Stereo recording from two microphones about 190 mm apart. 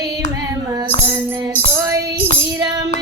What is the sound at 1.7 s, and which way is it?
Child singing, 15° right (ahead or behind).